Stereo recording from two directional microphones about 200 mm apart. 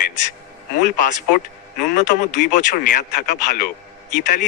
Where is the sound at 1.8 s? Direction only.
40° left (ahead or behind).